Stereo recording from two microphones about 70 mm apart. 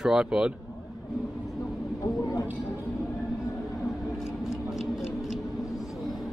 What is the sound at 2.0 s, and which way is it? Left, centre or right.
Speech, left.